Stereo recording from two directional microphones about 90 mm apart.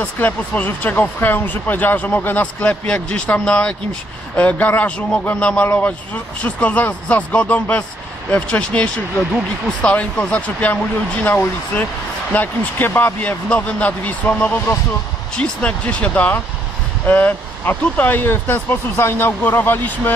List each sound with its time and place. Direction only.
0.0 s speech: 20° left (ahead or behind)